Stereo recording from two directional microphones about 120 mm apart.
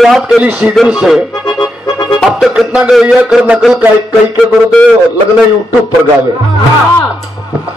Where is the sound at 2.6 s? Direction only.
5° right (ahead or behind).